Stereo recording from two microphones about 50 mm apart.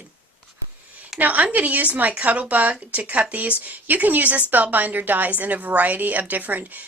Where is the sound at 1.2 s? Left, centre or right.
Right.